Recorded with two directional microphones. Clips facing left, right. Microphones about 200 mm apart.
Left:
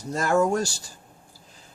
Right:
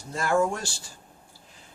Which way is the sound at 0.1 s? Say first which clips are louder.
Left 3 dB; 40° left (ahead or behind).